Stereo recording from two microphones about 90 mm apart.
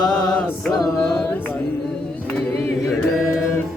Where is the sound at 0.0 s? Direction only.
45° left (ahead or behind).